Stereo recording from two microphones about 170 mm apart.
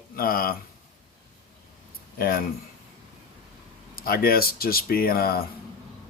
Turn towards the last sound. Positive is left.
turn(degrees=60)  # may be behind; listen again after turning